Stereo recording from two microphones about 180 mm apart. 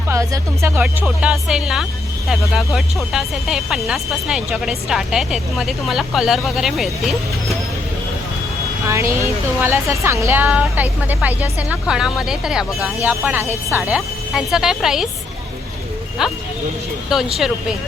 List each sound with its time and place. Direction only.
0.1 s speech: 15° right (ahead or behind); by 7.5 s centre (ahead or behind)
8.8 s speech: 15° right (ahead or behind)
16.2 s speech: 5° right (ahead or behind)